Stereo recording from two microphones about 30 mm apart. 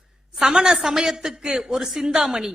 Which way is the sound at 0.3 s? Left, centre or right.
Right.